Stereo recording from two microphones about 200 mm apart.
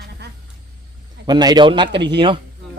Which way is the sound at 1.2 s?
20° right (ahead or behind).